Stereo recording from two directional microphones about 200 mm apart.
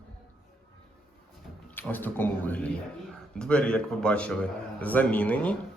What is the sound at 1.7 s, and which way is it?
A man's voice, 10° left (ahead or behind).